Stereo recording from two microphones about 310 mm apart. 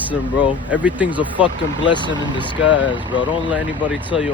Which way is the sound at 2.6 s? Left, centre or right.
Left.